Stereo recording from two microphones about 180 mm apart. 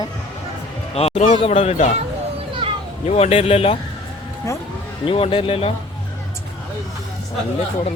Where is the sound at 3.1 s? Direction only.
35° left (ahead or behind).